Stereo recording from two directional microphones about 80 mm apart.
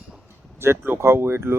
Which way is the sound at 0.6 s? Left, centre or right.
Right.